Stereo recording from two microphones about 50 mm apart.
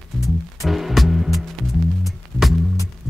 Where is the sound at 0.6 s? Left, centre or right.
Centre.